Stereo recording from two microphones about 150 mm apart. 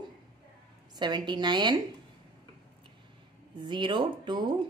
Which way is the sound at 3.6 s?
30° right (ahead or behind).